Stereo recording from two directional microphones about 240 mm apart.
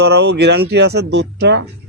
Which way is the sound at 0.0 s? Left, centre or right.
Right.